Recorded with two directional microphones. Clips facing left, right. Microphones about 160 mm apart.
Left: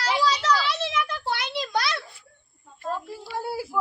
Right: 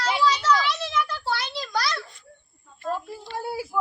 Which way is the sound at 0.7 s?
25° left (ahead or behind).